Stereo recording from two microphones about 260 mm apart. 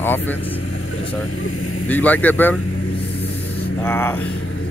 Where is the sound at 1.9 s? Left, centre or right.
Centre.